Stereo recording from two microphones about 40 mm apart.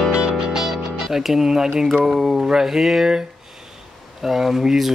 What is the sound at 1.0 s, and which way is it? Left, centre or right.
Speech, centre.